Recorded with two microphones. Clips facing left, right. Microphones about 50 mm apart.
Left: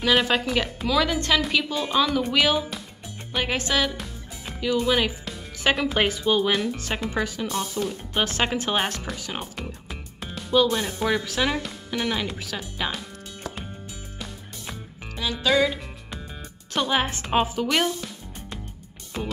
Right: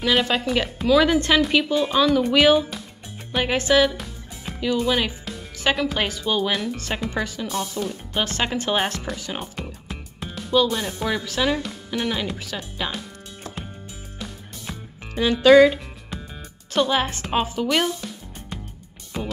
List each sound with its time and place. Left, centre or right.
0.0 s speech: centre
1.0 s a woman's voice: centre
1.4 s speech: centre
6.3 s speech: centre
8.2 s speech: centre
14.1 s music: centre
16.7 s speech: centre
19.1 s music: centre